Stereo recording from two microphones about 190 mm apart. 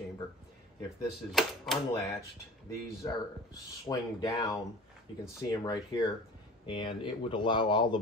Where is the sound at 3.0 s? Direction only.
15° left (ahead or behind).